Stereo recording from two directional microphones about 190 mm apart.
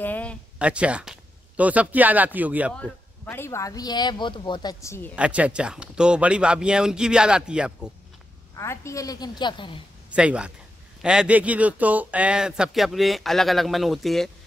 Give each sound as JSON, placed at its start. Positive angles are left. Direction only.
{"t": 0.0, "sound": "a sound", "side_deg": 10}
{"t": 0.6, "sound": "speech", "side_deg": -5}
{"t": 2.8, "sound": "a man's voice", "side_deg": 10}
{"t": 5.1, "sound": "speech", "side_deg": -5}
{"t": 8.5, "sound": "a man's voice", "side_deg": 15}
{"t": 10.1, "sound": "speech", "side_deg": -5}